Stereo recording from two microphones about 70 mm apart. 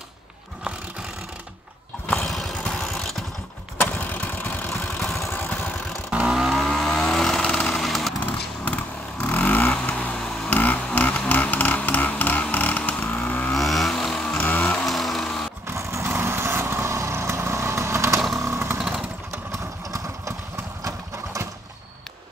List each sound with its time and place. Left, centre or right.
2.1 s vehicle: centre
3.8 s vehicle: left
6.1 s vehicle: centre
8.6 s vehicle: centre
11.0 s a sound: left
13.5 s vehicle: centre
14.3 s a sound: left
14.6 s music: centre
14.9 s a sound: centre
15.6 s vehicle: right
18.4 s chainsaw: right
18.8 s motorcycle: centre
20.8 s engine: right